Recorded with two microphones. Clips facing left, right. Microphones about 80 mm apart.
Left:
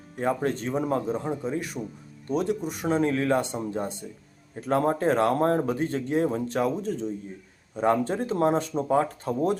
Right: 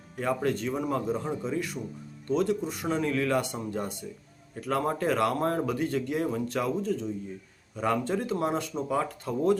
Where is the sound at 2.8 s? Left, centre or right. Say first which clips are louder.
Left 4 dB; left.